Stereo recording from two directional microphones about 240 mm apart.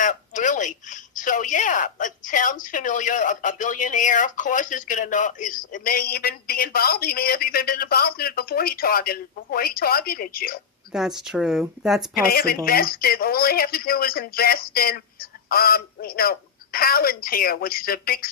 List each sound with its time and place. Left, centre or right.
0.0 s speech: left
10.9 s speech: centre
12.1 s speech: left